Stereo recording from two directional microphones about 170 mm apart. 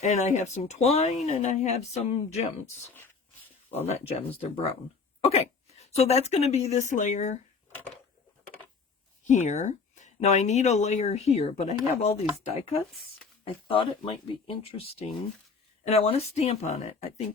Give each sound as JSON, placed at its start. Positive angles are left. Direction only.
{"t": 0.0, "sound": "speech", "side_deg": 45}
{"t": 3.8, "sound": "speech", "side_deg": 40}
{"t": 9.2, "sound": "speech", "side_deg": 45}
{"t": 13.4, "sound": "speech", "side_deg": 30}